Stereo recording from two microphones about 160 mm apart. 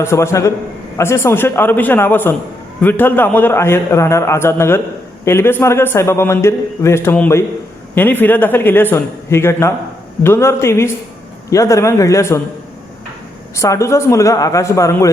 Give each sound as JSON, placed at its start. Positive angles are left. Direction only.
{"t": 0.0, "sound": "a man's voice", "side_deg": 15}
{"t": 13.6, "sound": "speech", "side_deg": 20}